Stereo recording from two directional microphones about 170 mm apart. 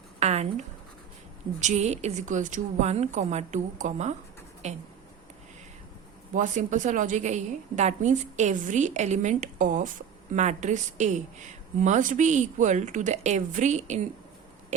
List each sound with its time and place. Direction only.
0.2 s speech: 40° right (ahead or behind)
1.6 s speech: 40° right (ahead or behind)
6.3 s speech: 45° right (ahead or behind)